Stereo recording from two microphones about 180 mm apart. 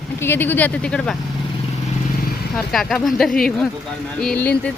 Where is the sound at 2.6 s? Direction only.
Centre (ahead or behind).